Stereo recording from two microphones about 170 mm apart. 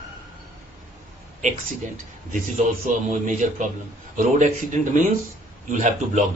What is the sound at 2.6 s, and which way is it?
Speech, 45° right (ahead or behind).